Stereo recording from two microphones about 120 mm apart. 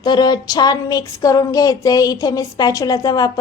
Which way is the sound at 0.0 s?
35° left (ahead or behind).